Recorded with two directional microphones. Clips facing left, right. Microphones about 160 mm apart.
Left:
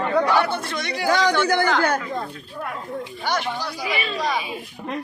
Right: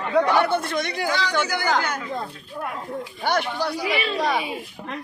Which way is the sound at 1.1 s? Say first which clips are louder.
Left 8 dB; 45° left (ahead or behind).